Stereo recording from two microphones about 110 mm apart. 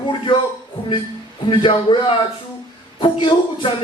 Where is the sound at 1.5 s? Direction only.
50° left (ahead or behind).